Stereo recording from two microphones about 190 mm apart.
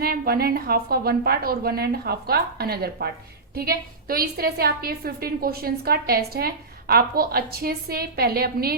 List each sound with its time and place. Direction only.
0.0 s a woman's voice: 55° right (ahead or behind)